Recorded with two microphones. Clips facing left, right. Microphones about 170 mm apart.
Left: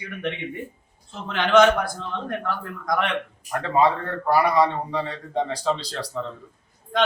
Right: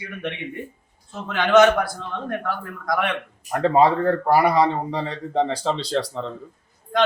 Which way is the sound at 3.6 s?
25° right (ahead or behind).